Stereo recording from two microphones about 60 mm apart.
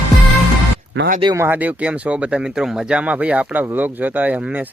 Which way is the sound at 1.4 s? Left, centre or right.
Right.